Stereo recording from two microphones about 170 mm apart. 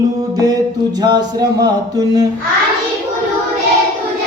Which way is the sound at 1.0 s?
25° right (ahead or behind).